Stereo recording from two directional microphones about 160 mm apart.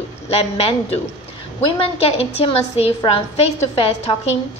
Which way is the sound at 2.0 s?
40° left (ahead or behind).